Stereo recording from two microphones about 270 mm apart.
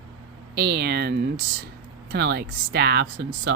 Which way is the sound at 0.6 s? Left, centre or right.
Right.